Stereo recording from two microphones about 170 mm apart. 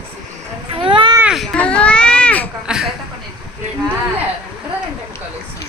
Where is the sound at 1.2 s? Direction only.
Centre (ahead or behind).